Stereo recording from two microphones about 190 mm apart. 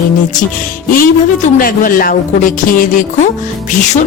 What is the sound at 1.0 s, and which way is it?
A woman's voice, 45° left (ahead or behind).